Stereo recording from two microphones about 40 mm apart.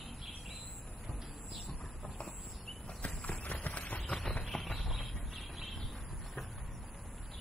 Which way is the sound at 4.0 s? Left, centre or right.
Centre.